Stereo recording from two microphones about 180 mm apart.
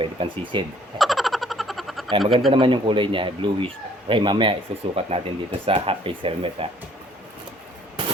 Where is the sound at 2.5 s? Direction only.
25° right (ahead or behind).